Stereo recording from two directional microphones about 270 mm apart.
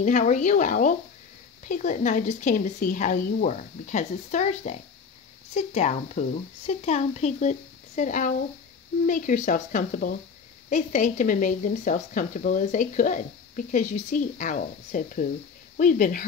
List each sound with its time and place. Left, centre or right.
0.0 s speech: left